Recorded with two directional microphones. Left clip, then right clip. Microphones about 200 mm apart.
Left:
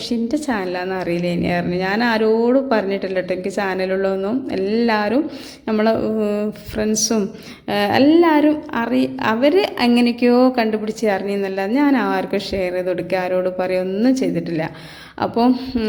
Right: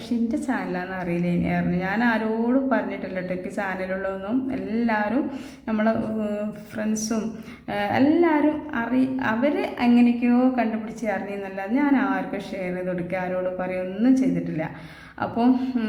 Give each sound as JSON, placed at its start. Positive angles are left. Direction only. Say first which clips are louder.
{"t": 0.3, "sound": "a woman's voice", "louder": "left 6 dB", "side_deg": 30}